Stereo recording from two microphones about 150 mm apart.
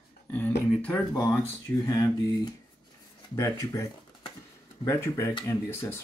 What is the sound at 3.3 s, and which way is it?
Speech, 20° left (ahead or behind).